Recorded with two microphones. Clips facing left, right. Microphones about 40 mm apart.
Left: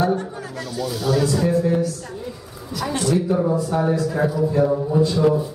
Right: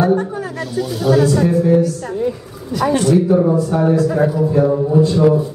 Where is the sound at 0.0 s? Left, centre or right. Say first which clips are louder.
Right 6 dB; centre.